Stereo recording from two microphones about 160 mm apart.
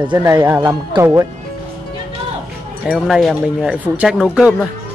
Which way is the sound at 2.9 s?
Centre (ahead or behind).